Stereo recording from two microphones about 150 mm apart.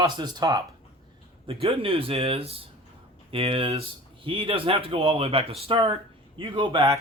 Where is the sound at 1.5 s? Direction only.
40° right (ahead or behind).